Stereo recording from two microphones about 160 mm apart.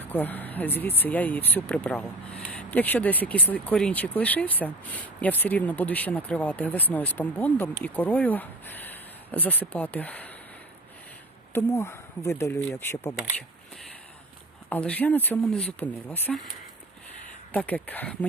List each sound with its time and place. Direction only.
0.0 s speech: 10° left (ahead or behind)
11.5 s speech: 15° left (ahead or behind)
14.7 s speech: 10° left (ahead or behind)
17.5 s speech: 10° left (ahead or behind)